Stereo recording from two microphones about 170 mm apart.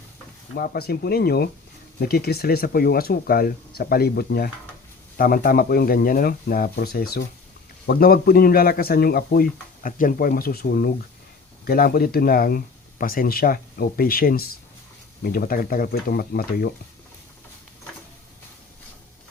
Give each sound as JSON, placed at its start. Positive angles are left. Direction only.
{"t": 0.5, "sound": "speech", "side_deg": 65}
{"t": 5.1, "sound": "speech", "side_deg": 55}